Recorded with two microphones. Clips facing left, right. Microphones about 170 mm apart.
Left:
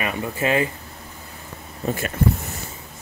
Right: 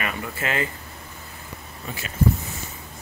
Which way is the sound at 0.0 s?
20° left (ahead or behind).